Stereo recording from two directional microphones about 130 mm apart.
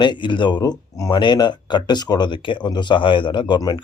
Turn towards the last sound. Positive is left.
turn(degrees=35)  # may be behind; listen again after turning